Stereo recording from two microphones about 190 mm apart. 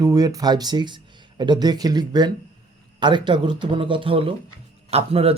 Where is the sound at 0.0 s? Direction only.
20° right (ahead or behind).